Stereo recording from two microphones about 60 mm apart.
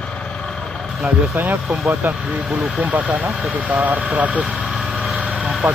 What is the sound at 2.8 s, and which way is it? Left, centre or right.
Speech, right.